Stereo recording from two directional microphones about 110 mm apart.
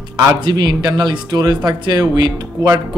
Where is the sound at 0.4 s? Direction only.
40° right (ahead or behind).